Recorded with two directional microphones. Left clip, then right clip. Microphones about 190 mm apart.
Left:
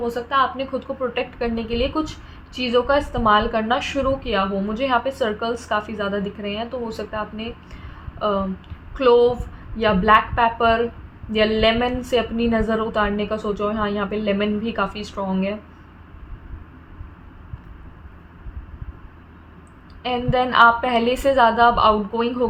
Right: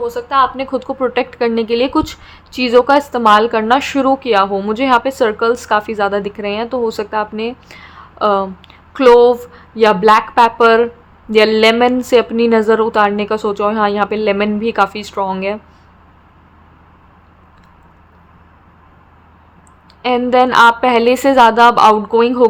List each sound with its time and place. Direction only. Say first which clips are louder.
0.0 s a woman's voice: right 6 dB; 35° right (ahead or behind); by 15.5 s 55° right (ahead or behind)
20.0 s a woman's voice: right 9 dB; 50° right (ahead or behind)